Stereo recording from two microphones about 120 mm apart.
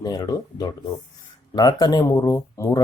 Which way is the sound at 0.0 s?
35° left (ahead or behind).